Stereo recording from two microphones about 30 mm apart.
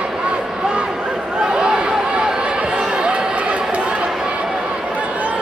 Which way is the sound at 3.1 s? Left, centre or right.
Right.